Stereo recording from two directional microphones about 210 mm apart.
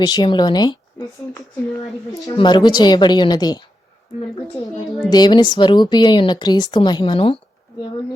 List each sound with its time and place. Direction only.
0.0 s speech: 20° left (ahead or behind)
5.0 s speech: 20° left (ahead or behind)